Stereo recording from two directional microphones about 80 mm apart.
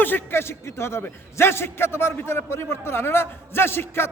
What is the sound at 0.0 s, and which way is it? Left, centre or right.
A man's voice, left.